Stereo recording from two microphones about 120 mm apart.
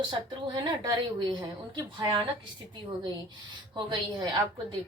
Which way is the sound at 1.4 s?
35° right (ahead or behind).